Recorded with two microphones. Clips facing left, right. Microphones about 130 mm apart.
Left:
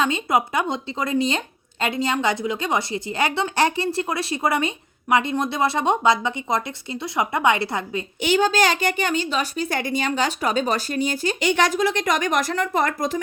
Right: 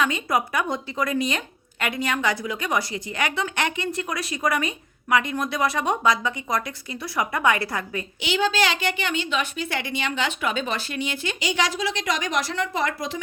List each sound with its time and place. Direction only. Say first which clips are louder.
0.0 s a woman's voice: left 2 dB; 25° left (ahead or behind)
8.2 s a woman's voice: left 4 dB; 45° left (ahead or behind)
11.3 s a woman's voice: left 5 dB; 55° left (ahead or behind)